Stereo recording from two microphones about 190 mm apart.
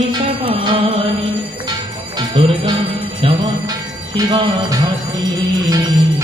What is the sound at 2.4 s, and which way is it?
Music, 25° right (ahead or behind).